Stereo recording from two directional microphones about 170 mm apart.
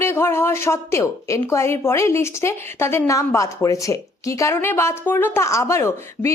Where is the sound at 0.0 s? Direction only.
15° left (ahead or behind).